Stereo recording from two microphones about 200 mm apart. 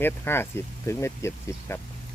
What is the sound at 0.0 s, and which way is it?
Speech, 10° left (ahead or behind).